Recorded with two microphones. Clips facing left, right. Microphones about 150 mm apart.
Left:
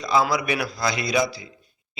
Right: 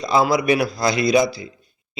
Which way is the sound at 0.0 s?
25° right (ahead or behind).